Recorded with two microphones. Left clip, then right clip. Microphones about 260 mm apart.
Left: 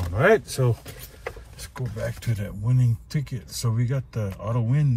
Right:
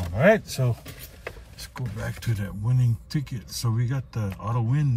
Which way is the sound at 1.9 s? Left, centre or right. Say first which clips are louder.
Left 5 dB; centre.